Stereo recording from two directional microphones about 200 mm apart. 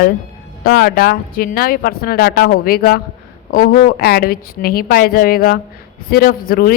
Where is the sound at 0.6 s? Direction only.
50° left (ahead or behind).